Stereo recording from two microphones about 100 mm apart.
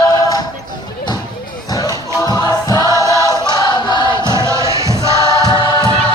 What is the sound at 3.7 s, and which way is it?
Choir, 50° left (ahead or behind).